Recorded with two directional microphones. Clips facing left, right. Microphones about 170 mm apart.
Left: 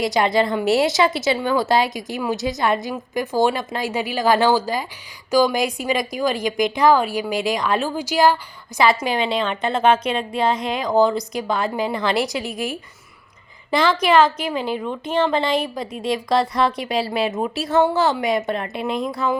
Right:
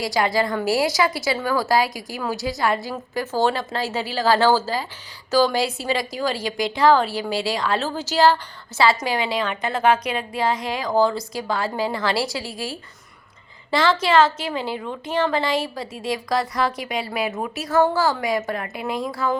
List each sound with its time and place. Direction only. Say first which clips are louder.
0.0 s a woman's voice: left 3 dB; 20° left (ahead or behind)